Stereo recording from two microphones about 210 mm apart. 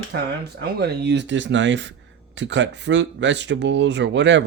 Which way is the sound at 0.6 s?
50° right (ahead or behind).